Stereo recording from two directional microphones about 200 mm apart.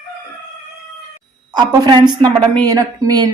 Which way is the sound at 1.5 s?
20° right (ahead or behind).